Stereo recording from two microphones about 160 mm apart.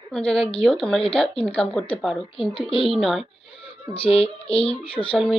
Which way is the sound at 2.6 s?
35° left (ahead or behind).